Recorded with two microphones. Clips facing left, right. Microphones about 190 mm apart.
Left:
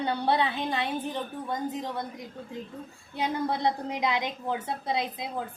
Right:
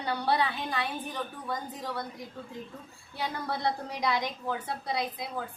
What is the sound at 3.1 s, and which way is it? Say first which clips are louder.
A woman's voice: left 5 dB; 20° left (ahead or behind).